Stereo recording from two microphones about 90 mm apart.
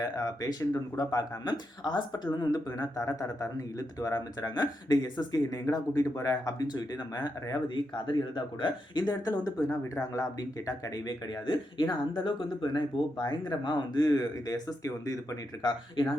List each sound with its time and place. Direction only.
0.0 s speech: 45° left (ahead or behind)
7.7 s speech: 65° left (ahead or behind); by 11.1 s 40° left (ahead or behind)
11.4 s speech: 60° left (ahead or behind); by 15.4 s 35° left (ahead or behind)
16.0 s speech: 60° left (ahead or behind)